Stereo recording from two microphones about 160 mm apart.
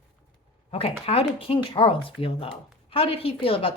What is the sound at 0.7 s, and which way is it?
A woman's voice, 35° left (ahead or behind).